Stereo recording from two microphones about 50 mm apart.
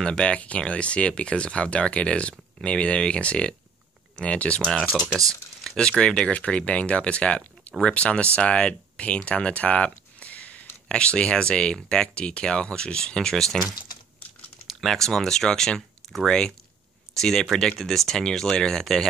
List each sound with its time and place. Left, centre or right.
0.0 s speech: centre
5.8 s speech: centre
14.7 s speech: centre